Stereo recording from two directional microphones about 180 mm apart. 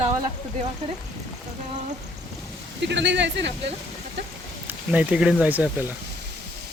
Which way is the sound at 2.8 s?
75° right (ahead or behind).